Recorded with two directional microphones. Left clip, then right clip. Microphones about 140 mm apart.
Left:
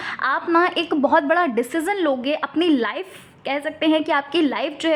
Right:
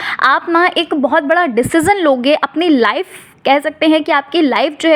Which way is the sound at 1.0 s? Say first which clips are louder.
Right 4 dB; 15° right (ahead or behind).